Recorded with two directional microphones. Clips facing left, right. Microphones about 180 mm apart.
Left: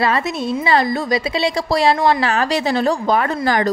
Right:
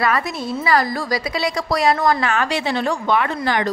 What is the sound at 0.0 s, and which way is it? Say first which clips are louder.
A woman's voice: left 2 dB; 25° left (ahead or behind).